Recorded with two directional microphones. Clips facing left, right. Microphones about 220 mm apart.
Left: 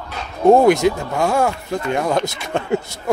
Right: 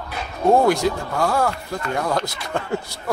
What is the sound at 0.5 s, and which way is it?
Speech, 20° left (ahead or behind).